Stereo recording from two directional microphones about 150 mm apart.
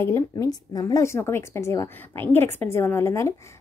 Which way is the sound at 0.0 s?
20° left (ahead or behind).